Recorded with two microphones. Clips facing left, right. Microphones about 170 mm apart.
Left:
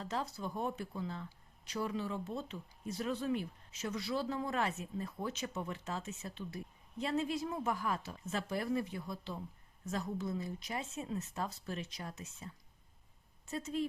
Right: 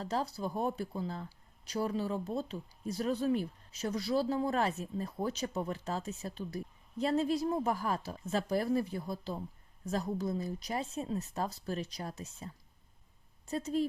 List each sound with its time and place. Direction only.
0.0 s speech: 35° right (ahead or behind)